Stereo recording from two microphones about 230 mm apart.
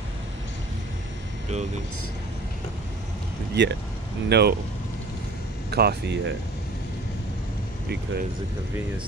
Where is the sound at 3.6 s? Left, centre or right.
Right.